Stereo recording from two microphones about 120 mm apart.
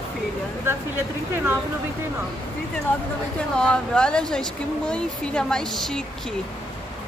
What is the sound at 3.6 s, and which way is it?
A woman's voice, 5° left (ahead or behind).